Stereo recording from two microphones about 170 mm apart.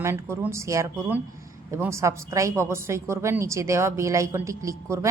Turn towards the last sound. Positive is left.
turn(degrees=-15)  # may be behind; listen again after turning